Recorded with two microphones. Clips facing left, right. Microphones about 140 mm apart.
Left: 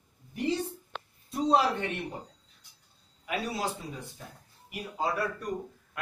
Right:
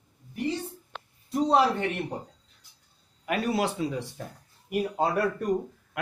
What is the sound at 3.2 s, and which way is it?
Speech, 65° right (ahead or behind).